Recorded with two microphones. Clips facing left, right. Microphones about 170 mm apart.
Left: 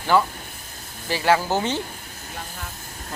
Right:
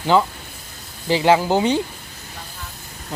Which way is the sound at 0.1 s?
20° right (ahead or behind).